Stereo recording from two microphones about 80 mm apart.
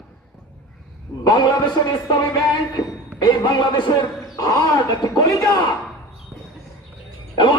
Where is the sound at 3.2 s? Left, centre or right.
Left.